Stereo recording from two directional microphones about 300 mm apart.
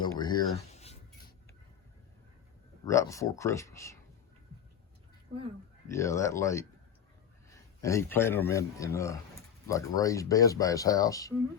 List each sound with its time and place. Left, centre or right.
0.0 s a sound: centre
0.7 s writing: left
2.8 s speech: centre
5.9 s speech: centre
7.8 s speech: centre